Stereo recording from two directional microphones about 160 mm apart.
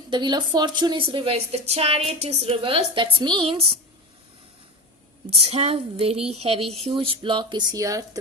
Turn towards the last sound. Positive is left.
turn(degrees=-20)  # may be behind; listen again after turning